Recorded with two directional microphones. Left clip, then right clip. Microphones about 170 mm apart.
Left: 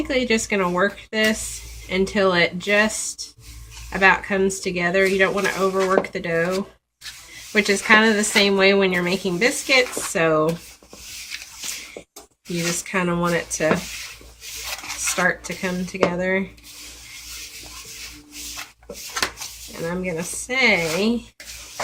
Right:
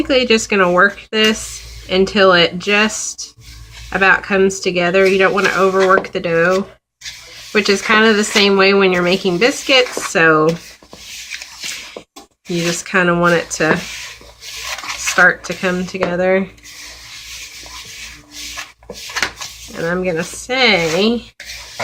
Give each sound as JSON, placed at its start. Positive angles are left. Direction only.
{"t": 0.1, "sound": "speech", "side_deg": -5}
{"t": 7.5, "sound": "speech", "side_deg": -5}
{"t": 12.9, "sound": "speech", "side_deg": -5}
{"t": 15.0, "sound": "speech", "side_deg": -5}
{"t": 19.1, "sound": "speech", "side_deg": -5}